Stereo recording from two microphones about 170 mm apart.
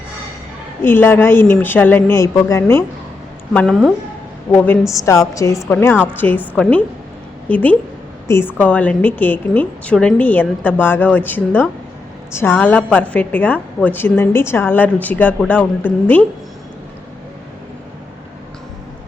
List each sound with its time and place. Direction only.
0.8 s a woman's voice: 15° left (ahead or behind)